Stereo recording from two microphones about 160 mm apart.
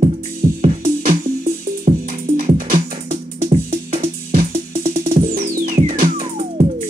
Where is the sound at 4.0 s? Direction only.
60° right (ahead or behind).